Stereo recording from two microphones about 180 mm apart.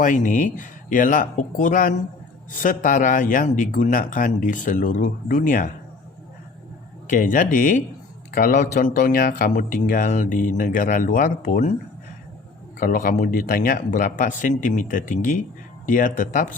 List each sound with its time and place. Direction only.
0.0 s speech: 45° left (ahead or behind)
7.1 s speech: 45° left (ahead or behind)
12.8 s speech: 55° left (ahead or behind)